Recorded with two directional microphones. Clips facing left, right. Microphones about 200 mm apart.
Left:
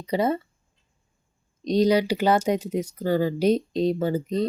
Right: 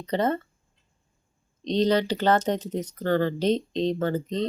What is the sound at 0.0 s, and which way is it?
Speech, 10° left (ahead or behind).